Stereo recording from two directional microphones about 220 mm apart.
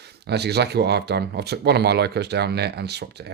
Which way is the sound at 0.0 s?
50° right (ahead or behind).